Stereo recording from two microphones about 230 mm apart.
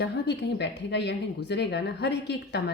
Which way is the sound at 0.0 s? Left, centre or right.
Left.